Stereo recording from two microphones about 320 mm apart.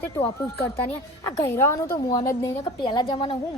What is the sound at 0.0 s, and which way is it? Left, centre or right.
Speech, centre.